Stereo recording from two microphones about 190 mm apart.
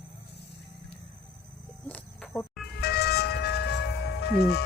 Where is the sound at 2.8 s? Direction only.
55° left (ahead or behind).